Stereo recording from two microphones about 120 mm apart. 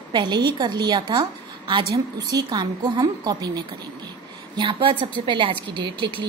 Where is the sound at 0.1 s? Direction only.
40° right (ahead or behind).